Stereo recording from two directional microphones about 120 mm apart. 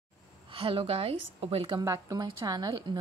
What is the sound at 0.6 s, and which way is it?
A woman's voice, 50° right (ahead or behind).